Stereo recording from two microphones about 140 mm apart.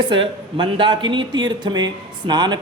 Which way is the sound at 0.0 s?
35° right (ahead or behind).